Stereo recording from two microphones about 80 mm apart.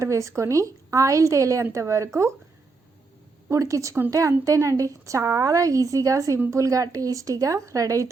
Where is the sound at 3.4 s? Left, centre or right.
Right.